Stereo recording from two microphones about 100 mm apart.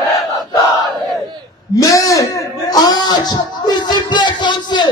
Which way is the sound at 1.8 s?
35° left (ahead or behind).